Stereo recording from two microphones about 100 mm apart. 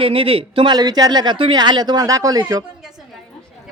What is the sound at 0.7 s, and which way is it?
Speech, 40° right (ahead or behind).